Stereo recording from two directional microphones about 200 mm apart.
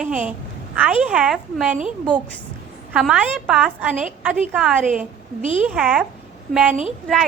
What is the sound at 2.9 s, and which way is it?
A woman's voice, 5° right (ahead or behind).